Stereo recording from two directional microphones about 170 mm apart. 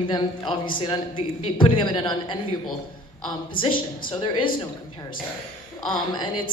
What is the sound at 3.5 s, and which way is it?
Speech, 55° left (ahead or behind).